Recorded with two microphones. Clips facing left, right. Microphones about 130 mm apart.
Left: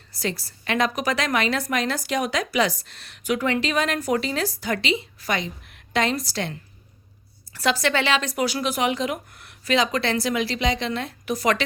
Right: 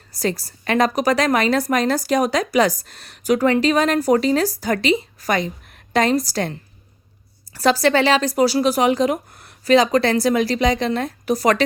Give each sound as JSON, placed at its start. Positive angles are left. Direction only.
{"t": 0.1, "sound": "a woman's voice", "side_deg": -40}
{"t": 7.5, "sound": "a woman's voice", "side_deg": -40}